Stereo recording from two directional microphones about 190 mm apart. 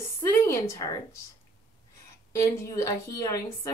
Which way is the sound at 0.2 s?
15° left (ahead or behind).